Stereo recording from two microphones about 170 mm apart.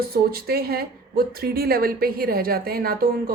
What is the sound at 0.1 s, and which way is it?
A woman's voice, 65° right (ahead or behind).